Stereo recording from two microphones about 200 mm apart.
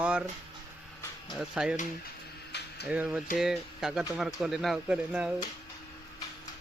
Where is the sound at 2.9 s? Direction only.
5° right (ahead or behind).